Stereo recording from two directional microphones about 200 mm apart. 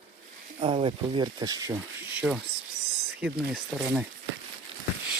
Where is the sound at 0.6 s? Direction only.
25° right (ahead or behind).